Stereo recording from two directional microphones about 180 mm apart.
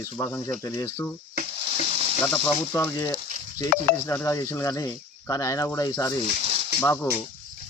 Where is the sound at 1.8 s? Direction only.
35° right (ahead or behind).